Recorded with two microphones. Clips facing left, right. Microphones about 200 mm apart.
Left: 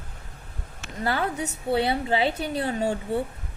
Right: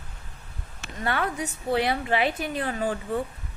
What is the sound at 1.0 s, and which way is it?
A woman's voice, 30° left (ahead or behind).